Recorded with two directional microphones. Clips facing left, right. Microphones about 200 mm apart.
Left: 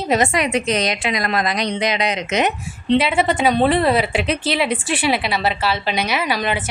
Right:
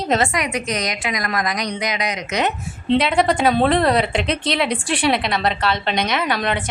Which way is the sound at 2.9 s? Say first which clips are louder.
Even; 5° left (ahead or behind).